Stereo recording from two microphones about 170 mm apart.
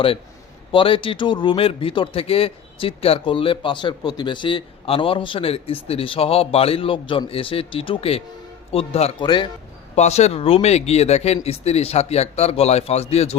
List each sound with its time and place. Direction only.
0.7 s a man's voice: 30° left (ahead or behind)
9.9 s a man's voice: 40° left (ahead or behind)